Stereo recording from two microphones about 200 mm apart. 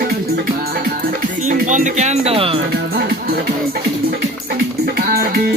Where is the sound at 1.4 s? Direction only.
40° right (ahead or behind).